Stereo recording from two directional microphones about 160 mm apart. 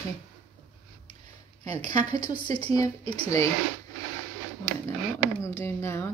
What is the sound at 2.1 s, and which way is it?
A woman's voice, 25° left (ahead or behind).